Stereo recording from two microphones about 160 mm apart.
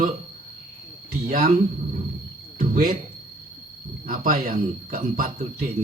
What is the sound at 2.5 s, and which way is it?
Cricket, 60° right (ahead or behind).